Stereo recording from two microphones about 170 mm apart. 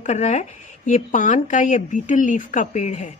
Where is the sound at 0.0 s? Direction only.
45° left (ahead or behind).